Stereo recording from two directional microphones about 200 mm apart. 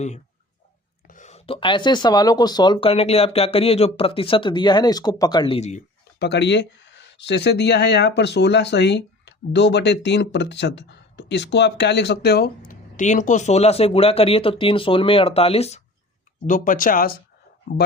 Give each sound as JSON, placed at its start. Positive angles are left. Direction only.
{"t": 1.0, "sound": "speech", "side_deg": 40}
{"t": 6.1, "sound": "speech", "side_deg": 55}
{"t": 16.5, "sound": "speech", "side_deg": 40}